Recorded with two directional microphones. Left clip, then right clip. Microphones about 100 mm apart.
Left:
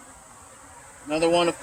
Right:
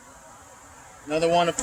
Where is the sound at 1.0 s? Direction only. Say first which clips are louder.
Even; 45° right (ahead or behind).